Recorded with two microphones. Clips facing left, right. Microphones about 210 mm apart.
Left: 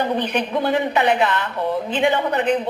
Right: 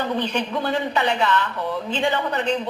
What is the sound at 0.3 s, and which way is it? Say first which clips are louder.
A woman's voice: left 3 dB; 20° left (ahead or behind).